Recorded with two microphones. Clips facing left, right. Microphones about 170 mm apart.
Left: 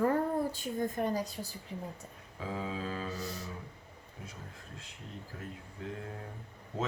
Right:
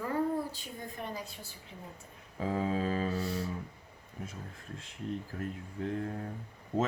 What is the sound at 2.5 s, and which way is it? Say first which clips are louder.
Mantra: right 6 dB; 50° right (ahead or behind).